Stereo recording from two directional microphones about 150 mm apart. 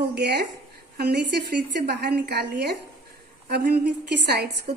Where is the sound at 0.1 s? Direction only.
90° right.